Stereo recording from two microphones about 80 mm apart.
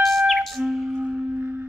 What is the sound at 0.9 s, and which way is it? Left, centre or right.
Wind instrument, centre.